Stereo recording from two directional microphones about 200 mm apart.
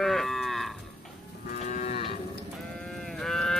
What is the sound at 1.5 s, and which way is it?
Moo, 35° left (ahead or behind).